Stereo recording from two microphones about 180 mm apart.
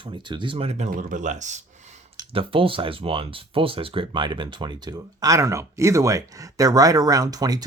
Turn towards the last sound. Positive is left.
turn(degrees=-20)  # may be behind; listen again after turning